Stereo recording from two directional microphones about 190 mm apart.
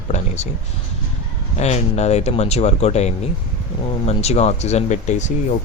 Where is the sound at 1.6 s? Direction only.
35° left (ahead or behind).